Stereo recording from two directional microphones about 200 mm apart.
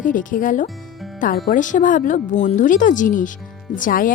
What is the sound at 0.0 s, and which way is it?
Speech, 40° left (ahead or behind).